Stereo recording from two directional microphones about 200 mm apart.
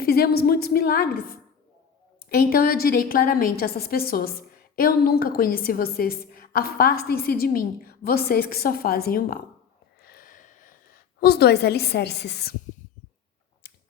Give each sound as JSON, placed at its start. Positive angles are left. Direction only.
{"t": 0.0, "sound": "a woman's voice", "side_deg": 50}
{"t": 2.3, "sound": "a woman's voice", "side_deg": 45}
{"t": 10.0, "sound": "a sound", "side_deg": 50}